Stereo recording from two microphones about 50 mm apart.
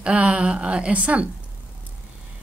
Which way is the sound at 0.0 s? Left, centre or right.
Right.